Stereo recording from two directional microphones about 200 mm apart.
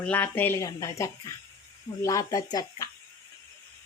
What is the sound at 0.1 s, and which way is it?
Speech, 10° left (ahead or behind).